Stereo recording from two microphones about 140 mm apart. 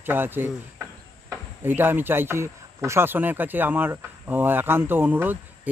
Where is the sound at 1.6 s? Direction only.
15° right (ahead or behind).